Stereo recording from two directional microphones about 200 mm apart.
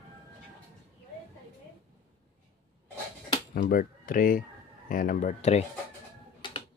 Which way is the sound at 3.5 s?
45° left (ahead or behind).